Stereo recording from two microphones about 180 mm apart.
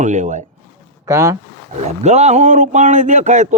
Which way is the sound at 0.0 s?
45° right (ahead or behind).